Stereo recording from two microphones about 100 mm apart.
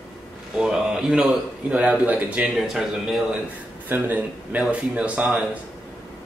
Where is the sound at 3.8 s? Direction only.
20° right (ahead or behind).